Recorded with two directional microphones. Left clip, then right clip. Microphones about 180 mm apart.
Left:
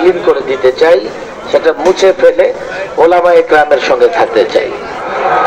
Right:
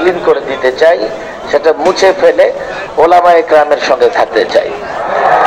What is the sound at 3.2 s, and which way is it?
A man's voice, 35° right (ahead or behind).